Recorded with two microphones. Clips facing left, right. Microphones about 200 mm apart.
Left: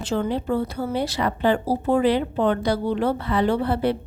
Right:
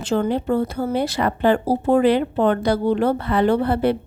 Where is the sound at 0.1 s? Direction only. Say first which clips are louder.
Right 4 dB; 50° right (ahead or behind).